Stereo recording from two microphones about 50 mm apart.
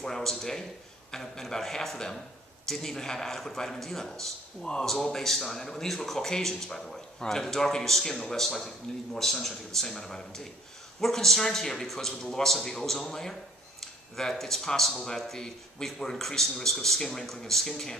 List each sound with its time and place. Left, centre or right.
0.0 s speech: centre